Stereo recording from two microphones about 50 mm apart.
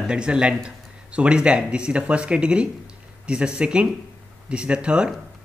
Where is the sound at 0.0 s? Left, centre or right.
Centre.